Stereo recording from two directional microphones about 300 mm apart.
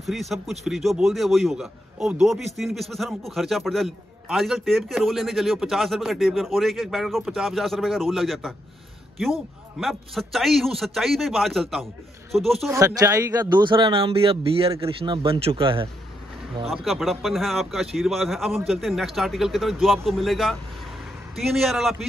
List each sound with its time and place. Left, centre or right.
0.0 s a man's voice: centre
12.7 s a man's voice: centre
16.6 s a man's voice: centre